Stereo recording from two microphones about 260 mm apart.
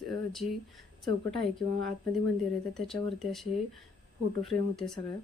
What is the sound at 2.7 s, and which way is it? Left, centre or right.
Speech, centre.